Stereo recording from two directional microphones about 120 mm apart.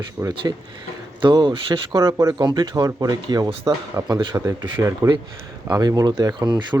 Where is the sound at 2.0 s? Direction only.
25° right (ahead or behind).